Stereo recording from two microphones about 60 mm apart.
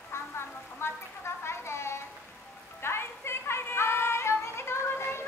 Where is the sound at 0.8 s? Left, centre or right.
Left.